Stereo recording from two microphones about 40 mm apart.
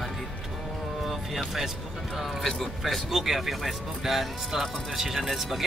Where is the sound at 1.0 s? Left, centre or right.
Centre.